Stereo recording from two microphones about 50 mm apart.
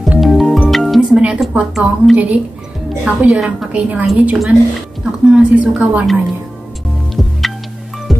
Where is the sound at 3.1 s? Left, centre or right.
Right.